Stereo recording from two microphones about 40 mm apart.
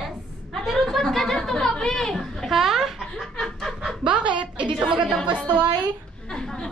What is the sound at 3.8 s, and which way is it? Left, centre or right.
Speech, right.